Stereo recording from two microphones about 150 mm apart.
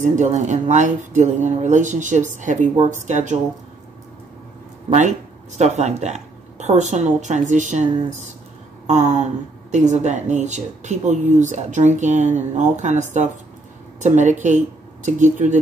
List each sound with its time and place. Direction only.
0.0 s speech: 55° right (ahead or behind)
4.8 s speech: 50° right (ahead or behind)